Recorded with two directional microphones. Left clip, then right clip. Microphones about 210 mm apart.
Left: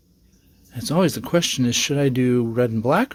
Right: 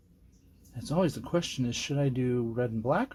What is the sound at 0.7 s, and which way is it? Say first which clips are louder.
Speech: left 9 dB; 40° left (ahead or behind).